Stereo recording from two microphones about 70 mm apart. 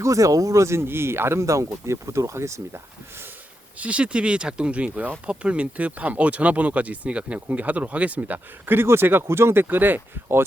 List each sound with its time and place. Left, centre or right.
0.0 s speech: right
3.8 s speech: centre